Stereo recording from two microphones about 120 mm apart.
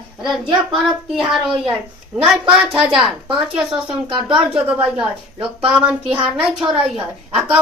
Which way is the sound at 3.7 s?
50° right (ahead or behind).